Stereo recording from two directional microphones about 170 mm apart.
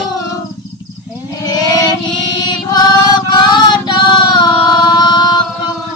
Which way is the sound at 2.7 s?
25° left (ahead or behind).